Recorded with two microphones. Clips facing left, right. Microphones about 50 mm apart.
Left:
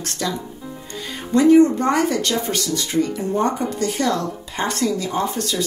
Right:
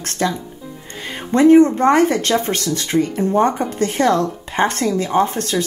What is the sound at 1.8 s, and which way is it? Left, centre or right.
A woman's voice, right.